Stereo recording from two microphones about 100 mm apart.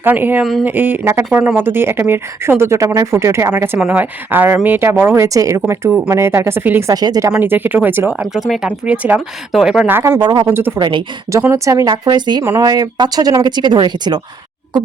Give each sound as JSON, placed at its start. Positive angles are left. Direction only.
{"t": 0.0, "sound": "speech", "side_deg": -20}
{"t": 6.9, "sound": "speech", "side_deg": -40}
{"t": 7.4, "sound": "speech", "side_deg": -20}
{"t": 8.2, "sound": "speech", "side_deg": 0}
{"t": 8.9, "sound": "speech", "side_deg": -10}
{"t": 9.9, "sound": "speech", "side_deg": -25}
{"t": 10.2, "sound": "speech", "side_deg": -40}
{"t": 10.5, "sound": "speech", "side_deg": -20}
{"t": 10.8, "sound": "speech", "side_deg": -50}
{"t": 11.5, "sound": "speech", "side_deg": -30}